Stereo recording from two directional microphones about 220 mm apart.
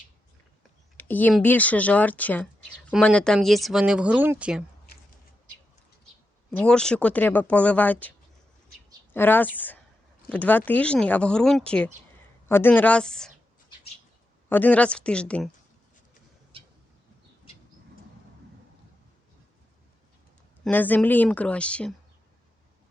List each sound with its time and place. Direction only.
0.9 s speech: 10° left (ahead or behind)
6.5 s speech: 5° left (ahead or behind)
9.1 s speech: 10° left (ahead or behind)
14.5 s speech: 5° left (ahead or behind)
16.5 s tick-tock: 25° right (ahead or behind)
20.7 s speech: 10° left (ahead or behind)